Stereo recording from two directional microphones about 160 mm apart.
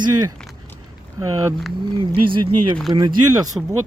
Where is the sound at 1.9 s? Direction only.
30° right (ahead or behind).